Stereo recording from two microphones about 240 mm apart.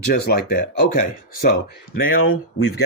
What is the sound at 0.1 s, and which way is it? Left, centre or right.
Speech, left.